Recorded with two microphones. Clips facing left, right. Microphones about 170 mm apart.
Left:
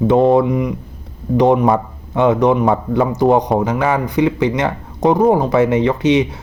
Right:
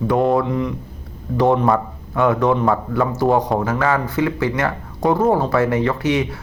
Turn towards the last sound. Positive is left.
turn(degrees=20)  # may be behind; listen again after turning